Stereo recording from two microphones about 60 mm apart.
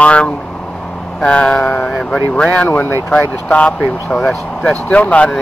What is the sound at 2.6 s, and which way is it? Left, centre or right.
Speech, left.